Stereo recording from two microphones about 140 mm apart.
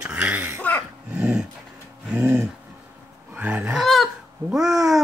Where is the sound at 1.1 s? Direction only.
5° right (ahead or behind).